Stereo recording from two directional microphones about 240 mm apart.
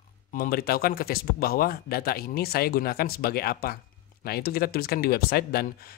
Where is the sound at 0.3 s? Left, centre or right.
Left.